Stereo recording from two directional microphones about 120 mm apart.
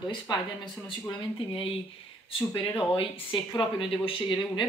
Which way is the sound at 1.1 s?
50° left (ahead or behind).